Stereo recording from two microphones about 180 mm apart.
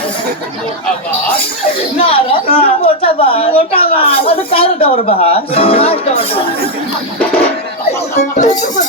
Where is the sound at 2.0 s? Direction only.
30° left (ahead or behind).